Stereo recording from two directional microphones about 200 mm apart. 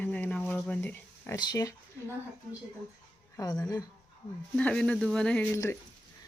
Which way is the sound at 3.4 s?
20° left (ahead or behind).